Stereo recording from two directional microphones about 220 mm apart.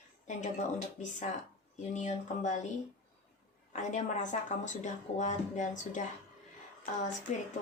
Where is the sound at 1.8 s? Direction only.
35° left (ahead or behind).